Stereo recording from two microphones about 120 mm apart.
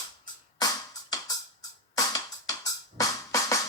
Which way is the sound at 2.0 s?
30° left (ahead or behind).